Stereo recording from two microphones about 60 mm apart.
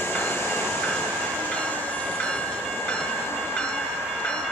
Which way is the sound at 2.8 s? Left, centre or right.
Left.